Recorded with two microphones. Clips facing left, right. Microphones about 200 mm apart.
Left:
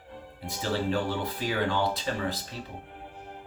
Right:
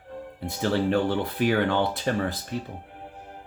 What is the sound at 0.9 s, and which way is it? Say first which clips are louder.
Speech: right 5 dB; 60° right (ahead or behind).